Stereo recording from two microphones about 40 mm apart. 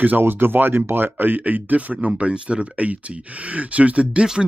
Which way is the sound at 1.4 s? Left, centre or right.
Right.